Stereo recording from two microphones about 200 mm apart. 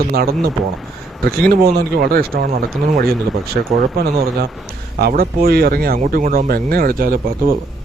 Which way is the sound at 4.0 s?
55° right (ahead or behind).